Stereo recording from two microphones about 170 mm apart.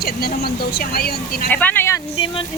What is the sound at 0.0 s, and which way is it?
Speech, 65° left (ahead or behind).